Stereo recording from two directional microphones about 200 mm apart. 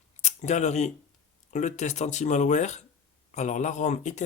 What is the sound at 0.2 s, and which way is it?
Speech, 35° left (ahead or behind).